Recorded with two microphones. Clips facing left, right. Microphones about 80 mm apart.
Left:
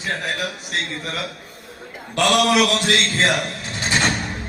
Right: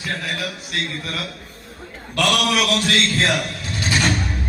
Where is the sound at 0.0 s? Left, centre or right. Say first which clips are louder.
Left 1 dB; left.